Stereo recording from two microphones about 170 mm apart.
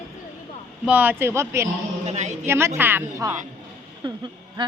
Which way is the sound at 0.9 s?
10° right (ahead or behind).